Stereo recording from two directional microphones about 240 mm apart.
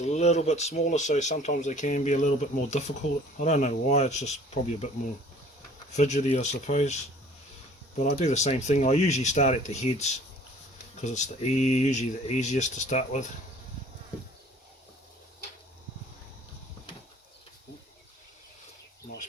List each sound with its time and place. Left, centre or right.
0.0 s speech: left
6.0 s speech: left